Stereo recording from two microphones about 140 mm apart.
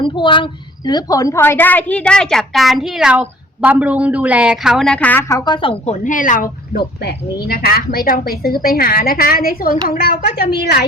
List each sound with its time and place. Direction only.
0.0 s a woman's voice: 35° left (ahead or behind); by 5.2 s 10° left (ahead or behind)
5.3 s a woman's voice: 35° left (ahead or behind)
5.8 s speech: 60° left (ahead or behind); by 6.8 s 75° left (ahead or behind)
7.4 s a woman's voice: 90° left